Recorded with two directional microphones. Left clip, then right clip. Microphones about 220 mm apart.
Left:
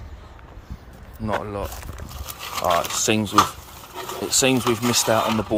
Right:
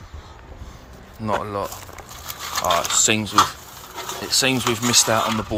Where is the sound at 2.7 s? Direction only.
20° left (ahead or behind).